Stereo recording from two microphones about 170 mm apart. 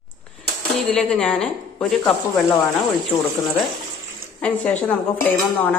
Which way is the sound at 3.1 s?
15° left (ahead or behind).